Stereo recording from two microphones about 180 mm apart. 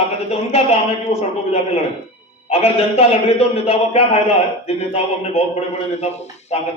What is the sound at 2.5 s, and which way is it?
A man's voice, 35° left (ahead or behind).